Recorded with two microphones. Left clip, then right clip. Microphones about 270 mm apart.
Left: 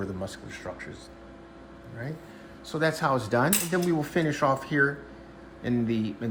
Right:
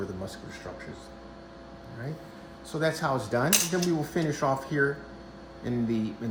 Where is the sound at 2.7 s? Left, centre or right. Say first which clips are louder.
Left 2 dB; centre.